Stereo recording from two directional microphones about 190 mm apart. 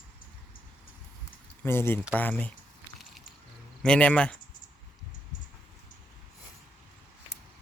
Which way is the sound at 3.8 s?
5° left (ahead or behind).